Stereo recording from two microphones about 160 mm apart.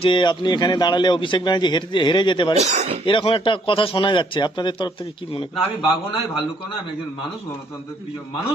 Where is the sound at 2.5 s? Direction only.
45° right (ahead or behind).